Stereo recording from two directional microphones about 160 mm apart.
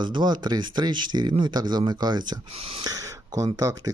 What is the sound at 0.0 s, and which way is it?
Speech, 30° right (ahead or behind).